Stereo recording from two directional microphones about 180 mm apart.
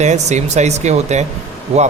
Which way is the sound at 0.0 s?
40° right (ahead or behind).